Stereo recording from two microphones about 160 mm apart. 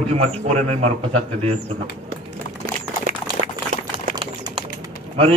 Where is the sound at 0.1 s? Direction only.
40° right (ahead or behind).